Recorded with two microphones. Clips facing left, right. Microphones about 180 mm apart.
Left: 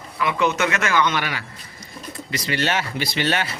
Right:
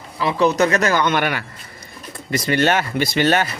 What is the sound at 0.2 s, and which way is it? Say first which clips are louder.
Speech: right 4 dB; 35° right (ahead or behind).